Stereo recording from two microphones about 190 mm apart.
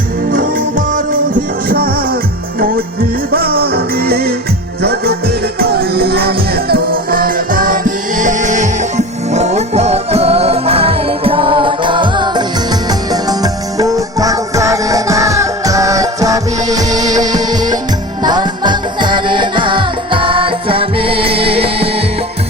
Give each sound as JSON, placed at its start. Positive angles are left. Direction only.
{"t": 0.3, "sound": "music", "side_deg": -45}